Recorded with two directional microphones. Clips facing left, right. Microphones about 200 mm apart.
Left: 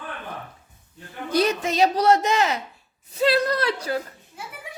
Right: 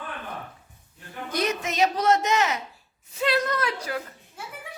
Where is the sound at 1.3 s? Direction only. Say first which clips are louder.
Left 6 dB; 30° left (ahead or behind).